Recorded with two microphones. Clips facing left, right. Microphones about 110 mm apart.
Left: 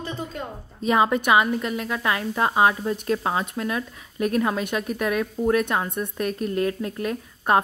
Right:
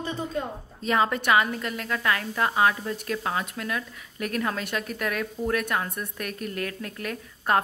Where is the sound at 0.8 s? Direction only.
15° left (ahead or behind).